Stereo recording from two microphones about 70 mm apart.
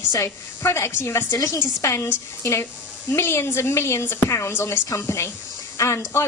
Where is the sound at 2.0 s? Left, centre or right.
Left.